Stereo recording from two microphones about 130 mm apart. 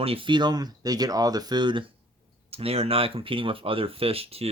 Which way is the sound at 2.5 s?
50° right (ahead or behind).